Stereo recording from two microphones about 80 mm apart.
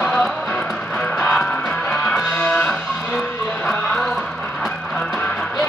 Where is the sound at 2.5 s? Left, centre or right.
Centre.